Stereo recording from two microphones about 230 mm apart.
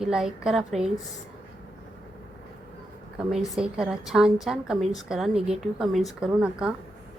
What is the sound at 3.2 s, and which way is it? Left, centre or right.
A woman's voice, centre.